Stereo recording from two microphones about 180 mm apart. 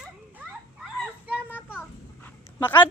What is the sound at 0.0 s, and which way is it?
Children playing, 5° right (ahead or behind).